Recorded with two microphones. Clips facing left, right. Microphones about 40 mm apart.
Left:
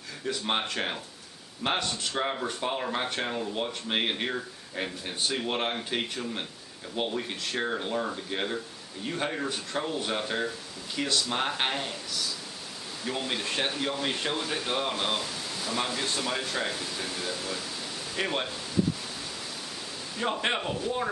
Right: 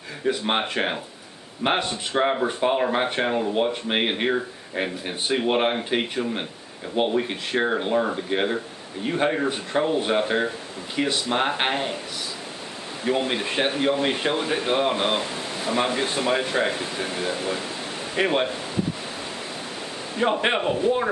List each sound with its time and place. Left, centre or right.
0.2 s speech: right
13.0 s speech: right
20.2 s speech: right